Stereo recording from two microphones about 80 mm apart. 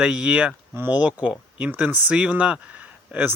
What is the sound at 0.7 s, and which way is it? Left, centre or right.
Speech, right.